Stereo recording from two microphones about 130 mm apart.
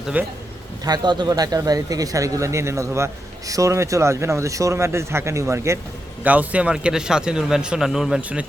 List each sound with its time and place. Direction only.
0.1 s a man's voice: 15° right (ahead or behind)
0.9 s speech: 35° right (ahead or behind)
6.2 s speech: 10° right (ahead or behind)